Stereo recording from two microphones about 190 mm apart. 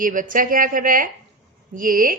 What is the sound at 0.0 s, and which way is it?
A woman's voice, 45° right (ahead or behind).